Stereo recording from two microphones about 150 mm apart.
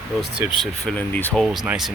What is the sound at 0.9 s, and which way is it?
Speech, 10° left (ahead or behind).